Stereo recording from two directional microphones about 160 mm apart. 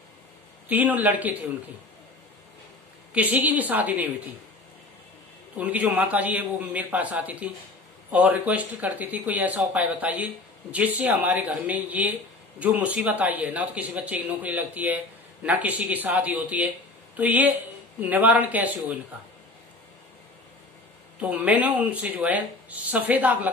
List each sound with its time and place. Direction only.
0.7 s speech: 10° right (ahead or behind)
3.1 s speech: 10° right (ahead or behind)
5.6 s speech: 10° right (ahead or behind)
21.2 s speech: 10° right (ahead or behind)